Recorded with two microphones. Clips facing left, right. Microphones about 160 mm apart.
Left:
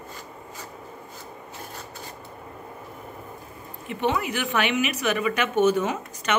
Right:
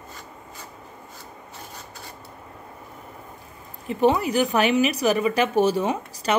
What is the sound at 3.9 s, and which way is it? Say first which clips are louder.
Speech: right 6 dB; 35° right (ahead or behind).